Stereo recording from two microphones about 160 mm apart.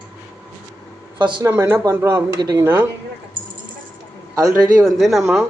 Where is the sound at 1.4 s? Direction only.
15° right (ahead or behind).